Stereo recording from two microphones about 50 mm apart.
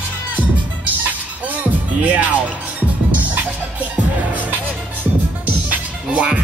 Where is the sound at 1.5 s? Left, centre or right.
Right.